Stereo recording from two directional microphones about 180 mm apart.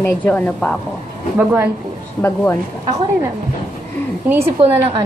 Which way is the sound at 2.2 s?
15° left (ahead or behind).